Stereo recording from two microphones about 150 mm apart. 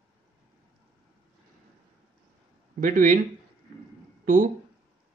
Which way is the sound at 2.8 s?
60° right (ahead or behind).